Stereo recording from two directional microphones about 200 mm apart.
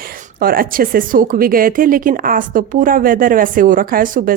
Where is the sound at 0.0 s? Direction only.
45° right (ahead or behind).